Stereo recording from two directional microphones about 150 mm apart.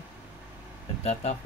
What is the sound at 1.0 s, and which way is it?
Speech, 45° left (ahead or behind).